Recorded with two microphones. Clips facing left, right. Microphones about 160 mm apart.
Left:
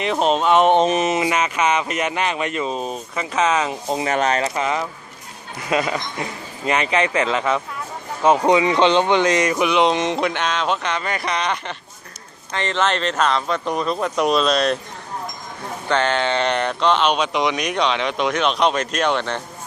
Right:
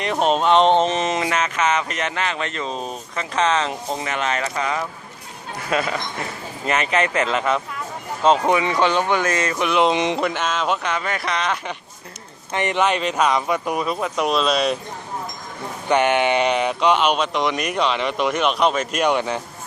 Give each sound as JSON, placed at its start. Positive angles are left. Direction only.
{"t": 0.0, "sound": "speech", "side_deg": 0}
{"t": 4.0, "sound": "speech", "side_deg": 40}
{"t": 6.9, "sound": "speech", "side_deg": 10}
{"t": 9.6, "sound": "speech", "side_deg": -5}
{"t": 15.9, "sound": "speech", "side_deg": -15}